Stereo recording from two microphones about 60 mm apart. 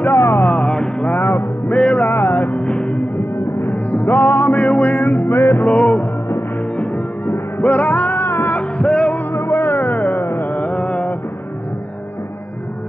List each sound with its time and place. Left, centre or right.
0.0 s music: left
2.0 s music: left
2.6 s music: centre
3.5 s music: left
5.7 s music: left
8.5 s music: centre
9.3 s music: left
10.5 s mantra: left